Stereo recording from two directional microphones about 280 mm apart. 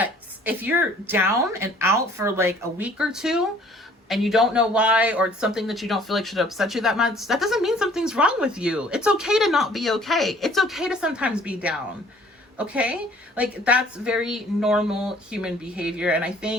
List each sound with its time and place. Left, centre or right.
0.0 s speech: centre